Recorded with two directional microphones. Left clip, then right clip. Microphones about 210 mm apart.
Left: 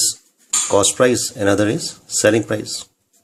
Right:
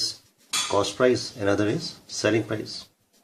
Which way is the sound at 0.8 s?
30° left (ahead or behind).